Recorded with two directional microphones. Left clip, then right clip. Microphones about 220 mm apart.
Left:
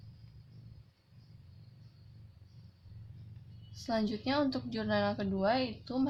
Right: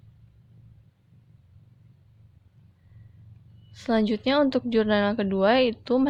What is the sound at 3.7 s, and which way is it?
A woman's voice, 40° right (ahead or behind).